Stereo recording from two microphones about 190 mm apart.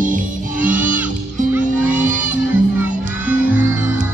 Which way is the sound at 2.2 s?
10° right (ahead or behind).